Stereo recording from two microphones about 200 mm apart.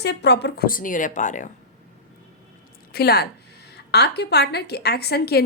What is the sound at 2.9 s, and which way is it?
A woman's voice, 50° left (ahead or behind).